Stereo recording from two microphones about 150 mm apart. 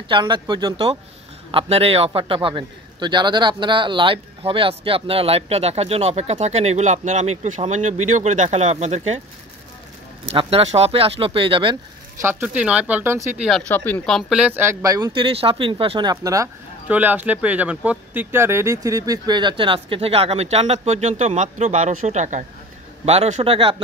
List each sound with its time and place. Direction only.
0.1 s a man's voice: 30° right (ahead or behind); by 9.2 s 50° right (ahead or behind)
10.3 s speech: 40° right (ahead or behind)
12.2 s speech: 15° right (ahead or behind)
13.4 s speech: 5° left (ahead or behind); by 15.1 s 25° right (ahead or behind)
15.1 s speech: 35° right (ahead or behind)
16.8 s speech: 10° right (ahead or behind); by 23.8 s 40° right (ahead or behind)